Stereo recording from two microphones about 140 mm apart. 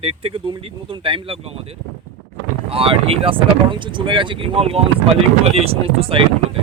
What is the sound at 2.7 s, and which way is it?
Speech, 40° right (ahead or behind).